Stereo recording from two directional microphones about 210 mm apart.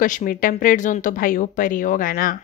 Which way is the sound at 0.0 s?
40° left (ahead or behind).